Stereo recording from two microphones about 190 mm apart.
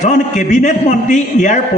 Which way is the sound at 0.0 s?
40° left (ahead or behind).